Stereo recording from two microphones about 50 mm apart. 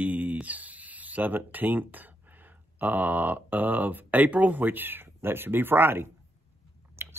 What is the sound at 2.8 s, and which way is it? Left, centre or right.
Speech, right.